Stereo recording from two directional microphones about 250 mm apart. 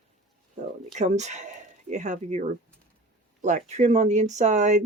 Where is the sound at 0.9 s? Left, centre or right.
Right.